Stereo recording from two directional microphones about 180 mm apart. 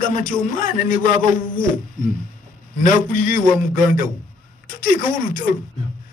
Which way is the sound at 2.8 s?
50° left (ahead or behind).